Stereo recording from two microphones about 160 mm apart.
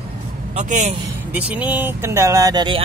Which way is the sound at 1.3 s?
10° right (ahead or behind).